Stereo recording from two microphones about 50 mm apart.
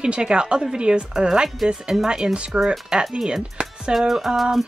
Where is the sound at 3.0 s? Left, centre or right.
Centre.